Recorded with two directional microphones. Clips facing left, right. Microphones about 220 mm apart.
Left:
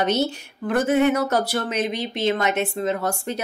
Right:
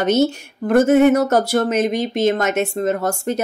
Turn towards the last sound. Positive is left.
turn(degrees=-45)  # may be behind; listen again after turning